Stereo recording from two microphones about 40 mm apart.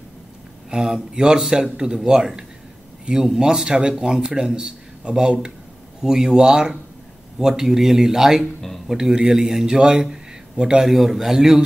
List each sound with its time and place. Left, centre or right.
0.7 s a man's voice: centre
8.5 s a sound: centre
8.8 s speech: centre
10.9 s a man's voice: centre